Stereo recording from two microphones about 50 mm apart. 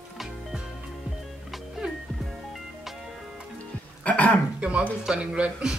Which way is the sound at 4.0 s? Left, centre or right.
Left.